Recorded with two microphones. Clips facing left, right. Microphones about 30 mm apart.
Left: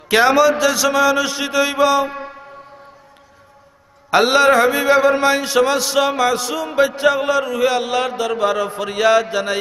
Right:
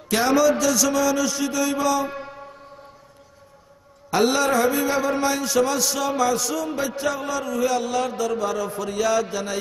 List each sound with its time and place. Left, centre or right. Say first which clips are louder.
0.1 s a man's voice: left 6 dB; left
2.0 s a sound: left 4 dB; left
4.1 s mantra: left 7 dB; left